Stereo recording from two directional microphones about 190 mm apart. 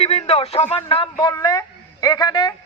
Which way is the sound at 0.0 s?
30° left (ahead or behind).